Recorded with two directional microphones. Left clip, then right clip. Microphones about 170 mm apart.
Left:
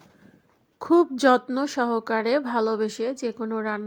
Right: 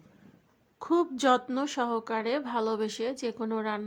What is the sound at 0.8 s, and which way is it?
A woman's voice, 35° left (ahead or behind).